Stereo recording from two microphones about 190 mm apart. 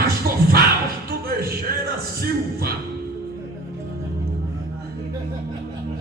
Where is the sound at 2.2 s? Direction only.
55° right (ahead or behind).